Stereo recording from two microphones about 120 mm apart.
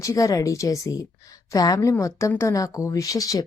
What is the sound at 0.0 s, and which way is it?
A woman's voice, 25° left (ahead or behind).